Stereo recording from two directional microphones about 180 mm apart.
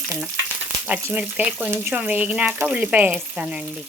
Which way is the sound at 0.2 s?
10° right (ahead or behind).